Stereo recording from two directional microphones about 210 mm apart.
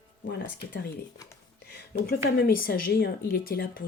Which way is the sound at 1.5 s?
50° left (ahead or behind).